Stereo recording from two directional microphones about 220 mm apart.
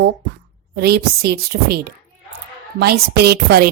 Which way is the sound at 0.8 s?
45° right (ahead or behind).